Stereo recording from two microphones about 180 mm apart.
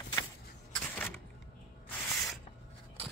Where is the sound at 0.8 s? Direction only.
10° left (ahead or behind).